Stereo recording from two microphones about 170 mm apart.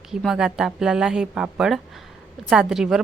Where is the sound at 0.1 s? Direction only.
Centre (ahead or behind).